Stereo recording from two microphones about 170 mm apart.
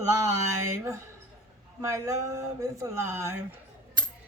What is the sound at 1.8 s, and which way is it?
A woman's voice, 15° right (ahead or behind).